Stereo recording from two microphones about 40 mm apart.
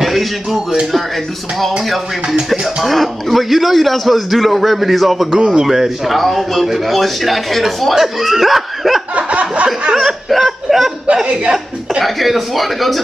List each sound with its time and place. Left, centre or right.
0.0 s a sound: centre
0.9 s a man's voice: centre
2.2 s music: right
2.6 s a man's voice: centre
9.1 s a sound: right
9.9 s chuckle: centre
11.1 s chuckle: right
12.0 s a man's voice: centre